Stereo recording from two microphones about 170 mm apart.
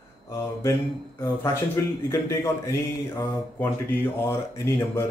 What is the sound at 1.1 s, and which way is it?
Speech, 15° left (ahead or behind).